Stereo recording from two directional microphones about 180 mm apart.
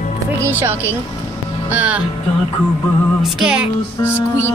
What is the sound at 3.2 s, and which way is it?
Speech, 5° right (ahead or behind).